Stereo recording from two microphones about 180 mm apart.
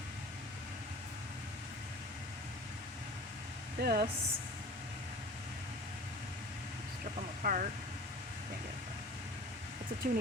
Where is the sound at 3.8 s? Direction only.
55° right (ahead or behind).